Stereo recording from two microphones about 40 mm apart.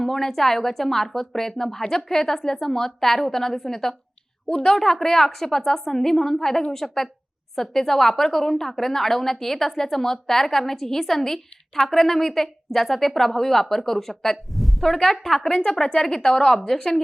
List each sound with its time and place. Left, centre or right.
0.0 s a woman's voice: centre